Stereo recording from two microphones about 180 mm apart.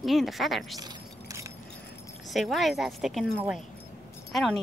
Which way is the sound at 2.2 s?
Centre (ahead or behind).